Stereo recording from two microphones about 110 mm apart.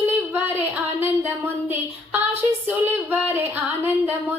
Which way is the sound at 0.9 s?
20° right (ahead or behind).